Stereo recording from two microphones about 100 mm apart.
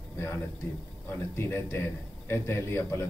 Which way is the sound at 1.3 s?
25° left (ahead or behind).